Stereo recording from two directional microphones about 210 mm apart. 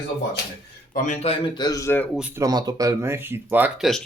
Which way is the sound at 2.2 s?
10° right (ahead or behind).